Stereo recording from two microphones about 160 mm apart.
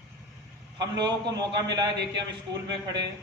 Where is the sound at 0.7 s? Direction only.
25° right (ahead or behind).